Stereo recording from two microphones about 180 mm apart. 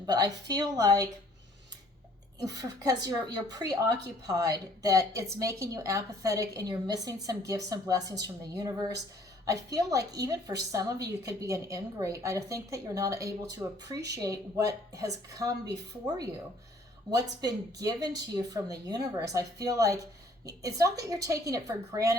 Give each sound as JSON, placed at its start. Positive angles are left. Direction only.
{"t": 0.0, "sound": "a woman's voice", "side_deg": -20}
{"t": 2.4, "sound": "a woman's voice", "side_deg": -20}
{"t": 17.4, "sound": "a woman's voice", "side_deg": -20}